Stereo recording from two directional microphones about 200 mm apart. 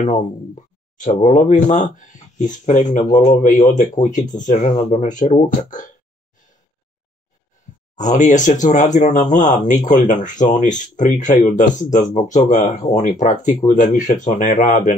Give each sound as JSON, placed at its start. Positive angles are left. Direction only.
{"t": 0.9, "sound": "speech", "side_deg": 35}
{"t": 7.9, "sound": "speech", "side_deg": 35}